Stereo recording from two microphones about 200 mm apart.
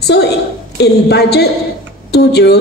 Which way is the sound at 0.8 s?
55° left (ahead or behind).